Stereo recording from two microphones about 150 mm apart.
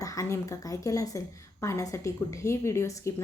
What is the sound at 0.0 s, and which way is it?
A woman's voice, 20° left (ahead or behind).